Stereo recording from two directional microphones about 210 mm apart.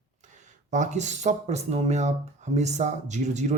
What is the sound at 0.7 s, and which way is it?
Speech, 35° right (ahead or behind).